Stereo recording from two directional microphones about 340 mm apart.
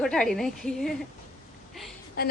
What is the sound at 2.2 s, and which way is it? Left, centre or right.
Speech, left.